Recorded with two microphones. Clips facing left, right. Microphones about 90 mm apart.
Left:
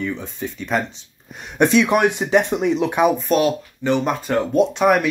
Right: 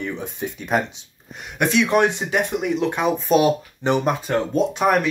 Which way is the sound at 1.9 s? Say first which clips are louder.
Left 2 dB; 15° left (ahead or behind).